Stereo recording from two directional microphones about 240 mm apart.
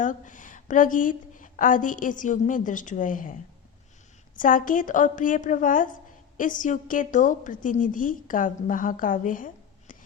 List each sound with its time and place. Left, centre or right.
0.0 s a woman's voice: left
4.4 s a woman's voice: left